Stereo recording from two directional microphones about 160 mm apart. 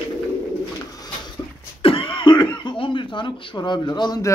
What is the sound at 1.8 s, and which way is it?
A man's voice, 35° left (ahead or behind).